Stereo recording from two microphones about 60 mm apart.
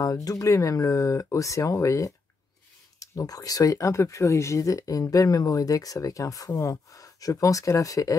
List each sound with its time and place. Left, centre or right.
0.0 s speech: left
5.1 s speech: left